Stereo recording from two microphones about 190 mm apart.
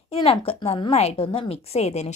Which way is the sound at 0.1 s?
30° left (ahead or behind).